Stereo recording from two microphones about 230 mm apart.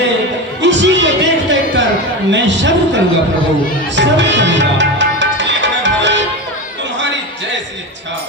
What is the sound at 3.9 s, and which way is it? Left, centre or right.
Music, right.